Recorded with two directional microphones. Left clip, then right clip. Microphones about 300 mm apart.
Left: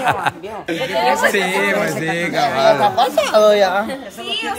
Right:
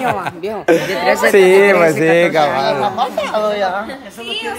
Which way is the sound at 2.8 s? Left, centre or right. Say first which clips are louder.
Left 2 dB; left.